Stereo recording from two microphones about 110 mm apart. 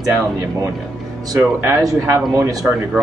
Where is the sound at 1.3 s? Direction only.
35° right (ahead or behind).